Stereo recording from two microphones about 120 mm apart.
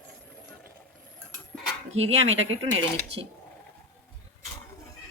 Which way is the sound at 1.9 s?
60° right (ahead or behind).